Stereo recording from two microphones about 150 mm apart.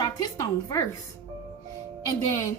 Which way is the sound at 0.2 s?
25° left (ahead or behind).